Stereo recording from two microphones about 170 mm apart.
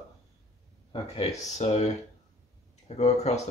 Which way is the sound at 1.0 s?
40° left (ahead or behind).